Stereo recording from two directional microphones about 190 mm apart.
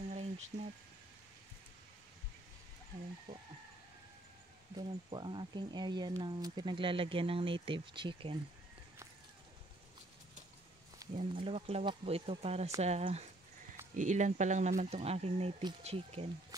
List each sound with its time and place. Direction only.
0.1 s a sound: 35° right (ahead or behind)
3.3 s speech: 20° right (ahead or behind)
4.7 s speech: 25° right (ahead or behind)
11.1 s speech: 30° right (ahead or behind)